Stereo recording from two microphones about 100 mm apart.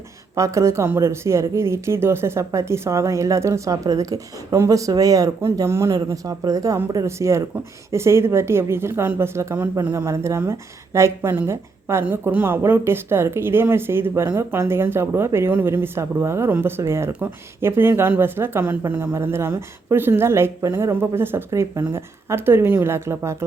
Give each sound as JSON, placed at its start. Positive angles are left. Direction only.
{"t": 0.3, "sound": "speech", "side_deg": -30}
{"t": 12.0, "sound": "speech", "side_deg": -15}